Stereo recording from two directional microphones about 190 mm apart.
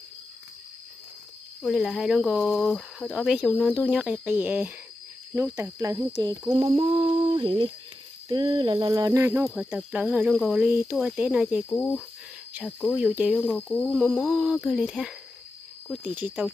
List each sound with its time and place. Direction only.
1.6 s speech: centre (ahead or behind)
9.4 s speech: 5° right (ahead or behind)
12.9 s speech: 5° right (ahead or behind)